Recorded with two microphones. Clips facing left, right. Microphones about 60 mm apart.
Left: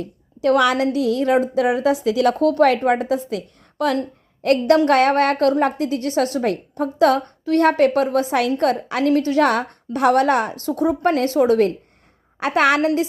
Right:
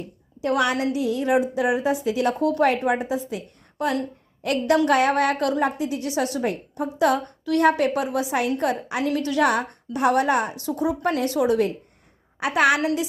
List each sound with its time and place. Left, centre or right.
0.0 s a woman's voice: left
0.9 s a woman's voice: left
4.9 s a woman's voice: left
6.4 s a woman's voice: left
8.3 s a woman's voice: left
9.1 s a woman's voice: left
9.4 s a woman's voice: left